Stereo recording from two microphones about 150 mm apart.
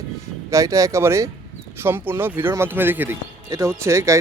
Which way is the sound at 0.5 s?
20° right (ahead or behind).